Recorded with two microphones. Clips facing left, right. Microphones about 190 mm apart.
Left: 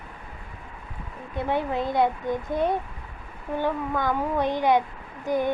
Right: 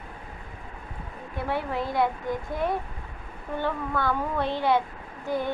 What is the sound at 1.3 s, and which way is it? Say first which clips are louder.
A child's voice: left 3 dB; 20° left (ahead or behind).